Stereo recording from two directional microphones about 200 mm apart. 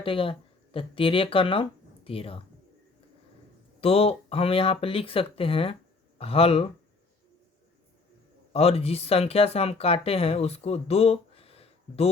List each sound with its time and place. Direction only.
0.0 s speech: 25° left (ahead or behind)
3.8 s speech: 30° left (ahead or behind)
8.5 s speech: 30° left (ahead or behind)